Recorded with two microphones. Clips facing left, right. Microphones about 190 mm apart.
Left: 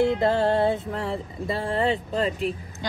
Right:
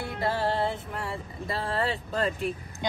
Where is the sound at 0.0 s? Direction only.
20° left (ahead or behind).